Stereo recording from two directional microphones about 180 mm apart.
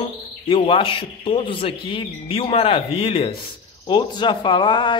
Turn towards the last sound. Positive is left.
turn(degrees=25)  # may be behind; listen again after turning